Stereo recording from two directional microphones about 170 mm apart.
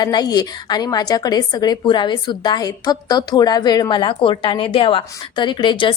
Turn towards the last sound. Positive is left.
turn(degrees=30)  # may be behind; listen again after turning